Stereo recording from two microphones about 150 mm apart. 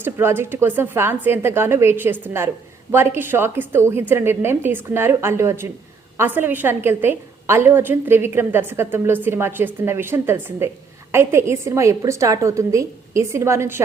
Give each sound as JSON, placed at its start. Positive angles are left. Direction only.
{"t": 0.0, "sound": "a woman's voice", "side_deg": -15}